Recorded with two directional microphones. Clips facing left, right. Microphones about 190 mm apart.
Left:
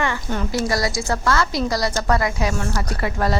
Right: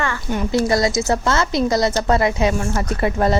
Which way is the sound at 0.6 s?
25° right (ahead or behind).